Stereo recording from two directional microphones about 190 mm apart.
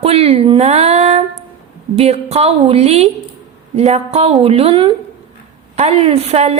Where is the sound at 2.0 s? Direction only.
35° right (ahead or behind).